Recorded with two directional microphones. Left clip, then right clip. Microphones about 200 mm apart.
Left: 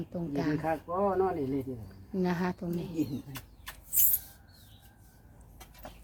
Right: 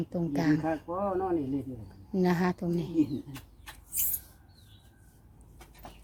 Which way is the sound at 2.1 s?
30° right (ahead or behind).